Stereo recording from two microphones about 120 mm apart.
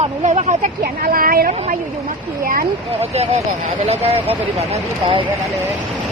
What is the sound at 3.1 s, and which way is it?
Speech, 60° right (ahead or behind).